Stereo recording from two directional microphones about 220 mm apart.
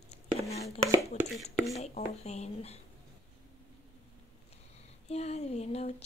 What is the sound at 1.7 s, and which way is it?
Speech, 30° left (ahead or behind).